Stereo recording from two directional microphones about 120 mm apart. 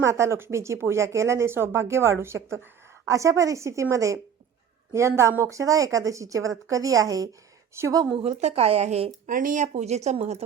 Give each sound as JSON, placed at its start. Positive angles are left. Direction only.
{"t": 0.0, "sound": "speech", "side_deg": -25}
{"t": 8.2, "sound": "speech", "side_deg": -65}
{"t": 9.2, "sound": "speech", "side_deg": -85}